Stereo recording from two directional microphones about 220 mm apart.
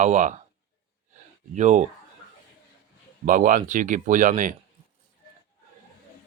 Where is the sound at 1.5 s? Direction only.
35° right (ahead or behind).